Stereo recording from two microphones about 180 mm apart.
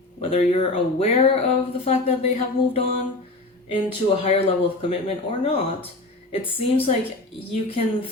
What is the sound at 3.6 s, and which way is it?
Speech, 30° left (ahead or behind).